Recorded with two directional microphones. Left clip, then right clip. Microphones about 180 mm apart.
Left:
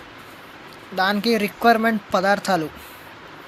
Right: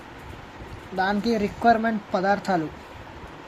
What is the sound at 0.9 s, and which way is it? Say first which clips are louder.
Speech: left 4 dB; 15° left (ahead or behind).